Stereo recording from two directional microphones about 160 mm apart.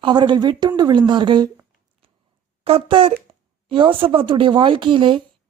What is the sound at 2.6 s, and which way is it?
Speech, 35° right (ahead or behind).